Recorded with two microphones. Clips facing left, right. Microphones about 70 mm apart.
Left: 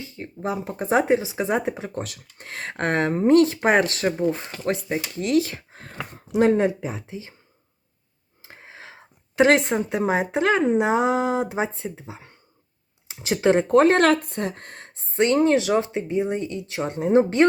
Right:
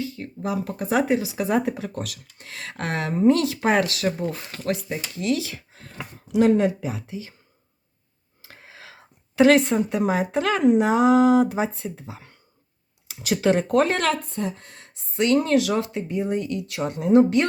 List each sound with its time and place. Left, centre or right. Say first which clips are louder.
0.0 s speech: right 1 dB; left
8.4 s speech: left 2 dB; left
14.3 s speech: even; left
15.1 s speech: left 1 dB; left